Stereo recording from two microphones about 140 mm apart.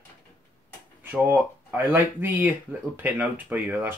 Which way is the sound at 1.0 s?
15° right (ahead or behind).